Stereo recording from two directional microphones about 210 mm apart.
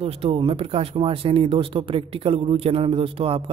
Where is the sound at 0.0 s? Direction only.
25° right (ahead or behind).